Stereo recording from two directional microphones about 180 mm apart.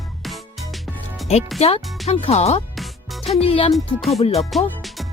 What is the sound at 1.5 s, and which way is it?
Speech, 35° left (ahead or behind).